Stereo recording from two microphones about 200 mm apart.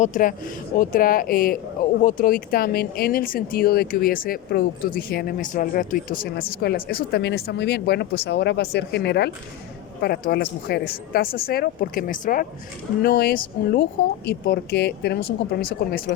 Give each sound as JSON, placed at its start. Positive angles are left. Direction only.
{"t": 0.0, "sound": "speech", "side_deg": 40}